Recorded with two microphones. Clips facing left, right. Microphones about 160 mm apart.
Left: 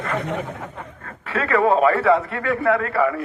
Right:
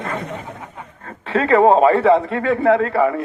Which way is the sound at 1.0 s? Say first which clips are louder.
Right 6 dB; 25° right (ahead or behind).